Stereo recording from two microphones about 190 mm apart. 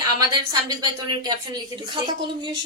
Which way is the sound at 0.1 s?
20° right (ahead or behind).